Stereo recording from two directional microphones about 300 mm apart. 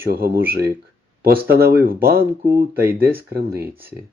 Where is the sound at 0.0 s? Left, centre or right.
Right.